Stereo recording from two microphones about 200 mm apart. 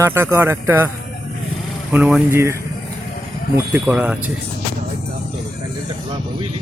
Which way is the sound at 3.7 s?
5° right (ahead or behind).